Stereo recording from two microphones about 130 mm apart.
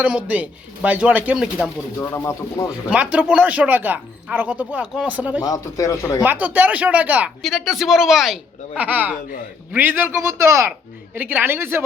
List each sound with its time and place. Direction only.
0.0 s speech: 10° right (ahead or behind)
2.0 s speech: 20° left (ahead or behind)
2.9 s speech: 10° right (ahead or behind)
5.4 s speech: 25° left (ahead or behind)
6.2 s speech: 15° right (ahead or behind)
7.4 s speech: centre (ahead or behind); by 11.8 s 20° right (ahead or behind)